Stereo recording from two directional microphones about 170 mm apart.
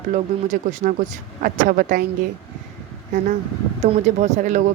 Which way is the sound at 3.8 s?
40° right (ahead or behind).